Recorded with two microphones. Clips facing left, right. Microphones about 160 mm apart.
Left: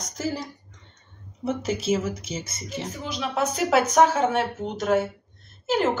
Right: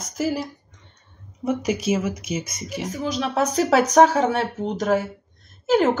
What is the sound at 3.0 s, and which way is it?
Speech, 40° right (ahead or behind).